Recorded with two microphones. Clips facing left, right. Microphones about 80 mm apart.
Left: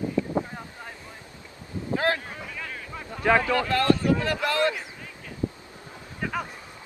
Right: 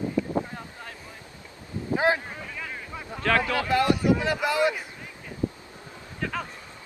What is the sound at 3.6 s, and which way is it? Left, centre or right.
Speech, centre.